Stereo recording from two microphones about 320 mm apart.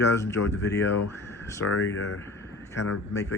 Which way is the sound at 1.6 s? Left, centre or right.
Left.